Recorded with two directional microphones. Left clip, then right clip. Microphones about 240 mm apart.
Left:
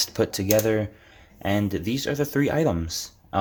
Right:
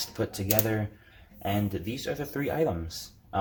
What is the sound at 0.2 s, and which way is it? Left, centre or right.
Speech, left.